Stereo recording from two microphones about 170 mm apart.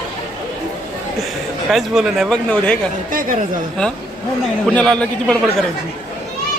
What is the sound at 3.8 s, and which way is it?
Speech, 5° left (ahead or behind).